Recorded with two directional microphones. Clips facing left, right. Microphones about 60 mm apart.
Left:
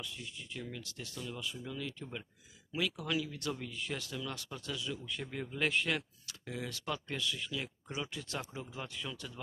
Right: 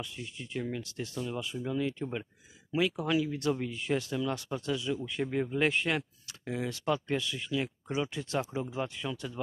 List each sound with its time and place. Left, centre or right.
0.0 s speech: right